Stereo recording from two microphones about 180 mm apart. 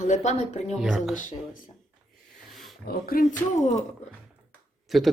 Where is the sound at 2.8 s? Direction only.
55° left (ahead or behind).